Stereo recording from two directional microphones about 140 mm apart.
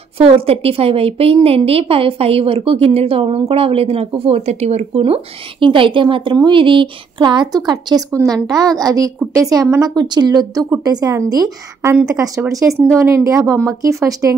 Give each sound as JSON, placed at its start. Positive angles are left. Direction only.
{"t": 0.2, "sound": "a woman's voice", "side_deg": -45}